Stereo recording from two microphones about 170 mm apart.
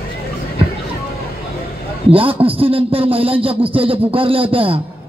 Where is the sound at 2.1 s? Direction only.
30° right (ahead or behind).